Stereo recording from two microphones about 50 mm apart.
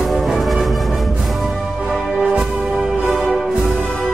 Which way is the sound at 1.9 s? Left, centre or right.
Centre.